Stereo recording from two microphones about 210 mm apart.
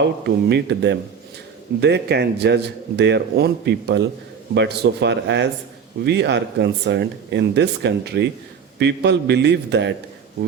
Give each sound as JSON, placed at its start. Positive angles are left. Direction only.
{"t": 0.0, "sound": "speech", "side_deg": -55}